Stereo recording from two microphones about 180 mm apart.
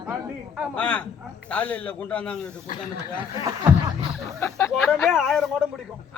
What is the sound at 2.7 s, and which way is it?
Speech, 55° left (ahead or behind).